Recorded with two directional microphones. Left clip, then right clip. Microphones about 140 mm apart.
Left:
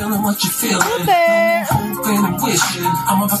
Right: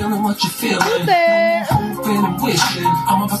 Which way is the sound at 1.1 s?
20° right (ahead or behind).